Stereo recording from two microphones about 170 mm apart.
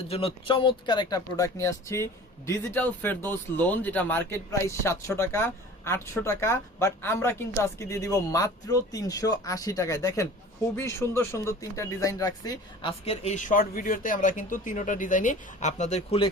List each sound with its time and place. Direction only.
0.1 s speech: 35° left (ahead or behind)
13.1 s speech: 40° left (ahead or behind)